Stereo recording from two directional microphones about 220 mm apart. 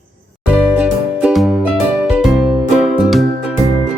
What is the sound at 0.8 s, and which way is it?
Music, 5° right (ahead or behind).